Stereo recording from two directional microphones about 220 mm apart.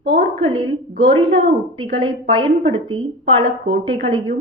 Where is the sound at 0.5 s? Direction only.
20° right (ahead or behind).